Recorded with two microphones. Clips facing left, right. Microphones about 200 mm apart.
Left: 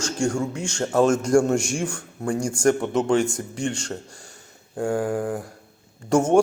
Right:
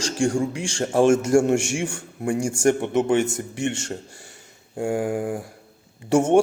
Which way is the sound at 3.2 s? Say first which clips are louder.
Right 1 dB; 25° right (ahead or behind).